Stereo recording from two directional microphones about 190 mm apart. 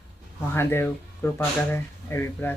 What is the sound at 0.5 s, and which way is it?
Speech, 10° left (ahead or behind).